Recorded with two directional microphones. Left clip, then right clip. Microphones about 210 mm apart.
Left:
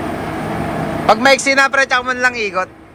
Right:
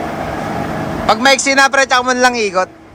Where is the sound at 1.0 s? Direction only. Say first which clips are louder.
Even; 5° right (ahead or behind).